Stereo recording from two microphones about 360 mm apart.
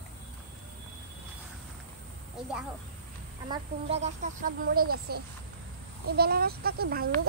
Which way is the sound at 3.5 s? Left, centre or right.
Centre.